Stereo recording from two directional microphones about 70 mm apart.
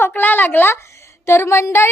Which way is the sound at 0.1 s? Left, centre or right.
Left.